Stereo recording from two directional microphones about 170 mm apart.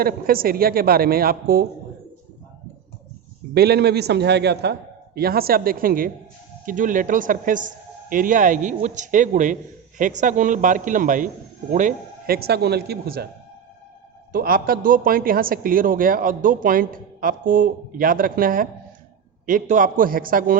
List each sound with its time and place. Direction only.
0.0 s a man's voice: 60° right (ahead or behind)
3.5 s a man's voice: 70° right (ahead or behind)
14.3 s a man's voice: 60° right (ahead or behind)